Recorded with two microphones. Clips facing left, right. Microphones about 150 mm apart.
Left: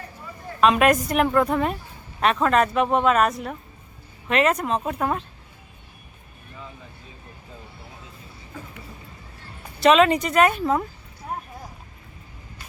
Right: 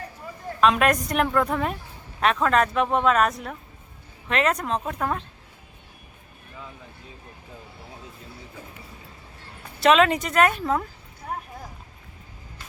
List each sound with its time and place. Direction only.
0.6 s speech: 5° left (ahead or behind)
9.8 s speech: centre (ahead or behind)